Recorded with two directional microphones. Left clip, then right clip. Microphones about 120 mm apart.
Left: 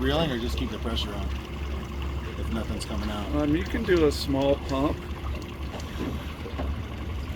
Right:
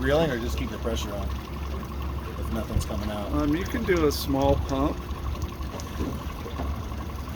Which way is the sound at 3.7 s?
30° right (ahead or behind).